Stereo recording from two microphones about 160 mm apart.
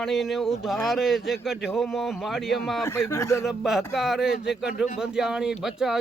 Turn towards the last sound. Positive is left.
turn(degrees=-5)  # may be behind; listen again after turning